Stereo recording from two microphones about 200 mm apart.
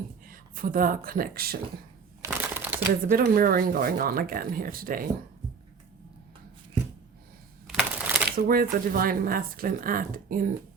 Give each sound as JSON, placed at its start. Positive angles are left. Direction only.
{"t": 0.3, "sound": "speech", "side_deg": -45}
{"t": 2.2, "sound": "crumpling", "side_deg": -10}
{"t": 3.1, "sound": "speech", "side_deg": -45}
{"t": 7.7, "sound": "a sound", "side_deg": -5}
{"t": 8.4, "sound": "speech", "side_deg": -45}